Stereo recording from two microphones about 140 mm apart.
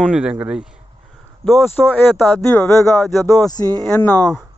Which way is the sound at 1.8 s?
10° left (ahead or behind).